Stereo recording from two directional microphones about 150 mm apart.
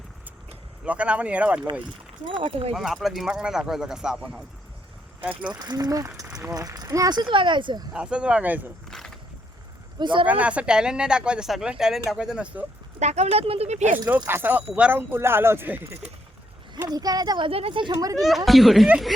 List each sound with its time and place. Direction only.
0.9 s speech: 10° right (ahead or behind)
2.4 s speech: 35° right (ahead or behind)
2.7 s speech: centre (ahead or behind)
5.5 s speech: 25° right (ahead or behind)
7.9 s speech: 5° right (ahead or behind)
8.9 s a sound: 5° left (ahead or behind)
10.0 s speech: 30° right (ahead or behind)
10.2 s speech: 10° right (ahead or behind)
13.0 s speech: 50° right (ahead or behind)
14.3 s speech: 15° right (ahead or behind)
16.9 s speech: 25° right (ahead or behind)
17.9 s speech: 20° right (ahead or behind)
18.2 s speech: centre (ahead or behind)